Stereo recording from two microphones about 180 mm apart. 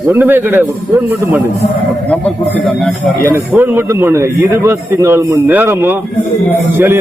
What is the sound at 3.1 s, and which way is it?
A man's voice, 15° right (ahead or behind).